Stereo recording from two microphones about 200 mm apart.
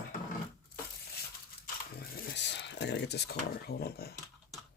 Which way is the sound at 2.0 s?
55° left (ahead or behind).